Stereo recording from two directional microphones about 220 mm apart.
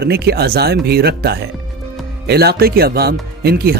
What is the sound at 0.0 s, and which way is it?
Speech, 45° right (ahead or behind).